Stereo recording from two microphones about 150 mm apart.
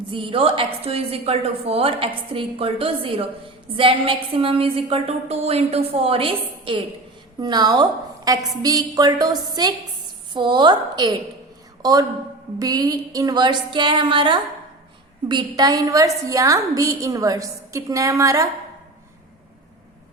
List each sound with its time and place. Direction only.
0.1 s a woman's voice: 35° right (ahead or behind); by 18.4 s 20° right (ahead or behind)